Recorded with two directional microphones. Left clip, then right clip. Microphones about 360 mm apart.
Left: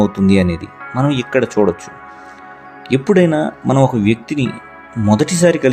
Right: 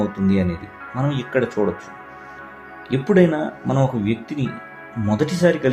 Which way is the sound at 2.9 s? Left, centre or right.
Left.